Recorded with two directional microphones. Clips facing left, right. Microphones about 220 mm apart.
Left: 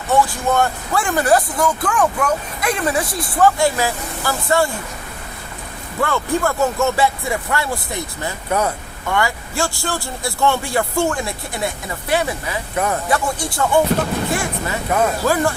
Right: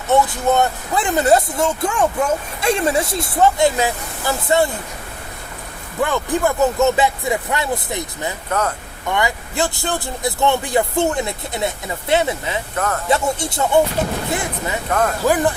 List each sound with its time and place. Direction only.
0.1 s speech: 20° right (ahead or behind)
6.0 s speech: 15° right (ahead or behind)
8.4 s speech: 10° left (ahead or behind)
9.0 s speech: 20° right (ahead or behind)
12.7 s speech: 10° left (ahead or behind)
13.1 s speech: 25° right (ahead or behind)
14.8 s speech: 10° left (ahead or behind)
15.2 s speech: 15° right (ahead or behind)